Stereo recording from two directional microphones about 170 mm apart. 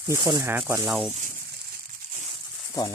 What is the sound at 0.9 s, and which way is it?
Speech, 5° right (ahead or behind).